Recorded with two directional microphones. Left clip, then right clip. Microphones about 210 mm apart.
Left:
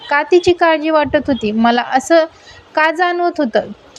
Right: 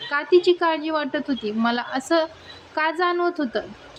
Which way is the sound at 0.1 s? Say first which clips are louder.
Left 7 dB; 30° left (ahead or behind).